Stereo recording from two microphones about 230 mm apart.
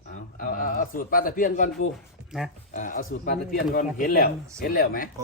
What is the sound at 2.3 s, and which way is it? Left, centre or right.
Speech, centre.